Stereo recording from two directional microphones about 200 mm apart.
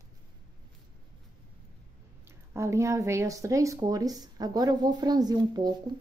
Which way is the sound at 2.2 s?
15° right (ahead or behind).